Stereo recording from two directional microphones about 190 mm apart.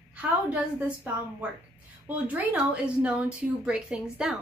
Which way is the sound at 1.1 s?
10° right (ahead or behind).